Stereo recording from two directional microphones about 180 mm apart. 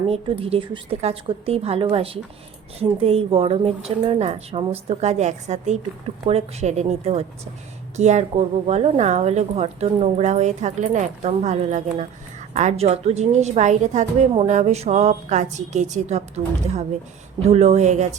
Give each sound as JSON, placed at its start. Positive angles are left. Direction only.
{"t": 0.1, "sound": "a woman's voice", "side_deg": -30}